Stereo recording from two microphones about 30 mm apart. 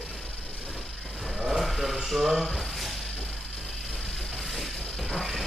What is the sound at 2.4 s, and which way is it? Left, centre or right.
Speech, centre.